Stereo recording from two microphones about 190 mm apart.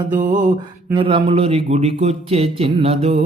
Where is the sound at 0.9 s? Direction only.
25° right (ahead or behind).